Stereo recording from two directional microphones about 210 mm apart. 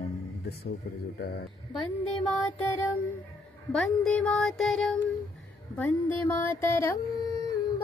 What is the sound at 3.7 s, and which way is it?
Music, 5° left (ahead or behind).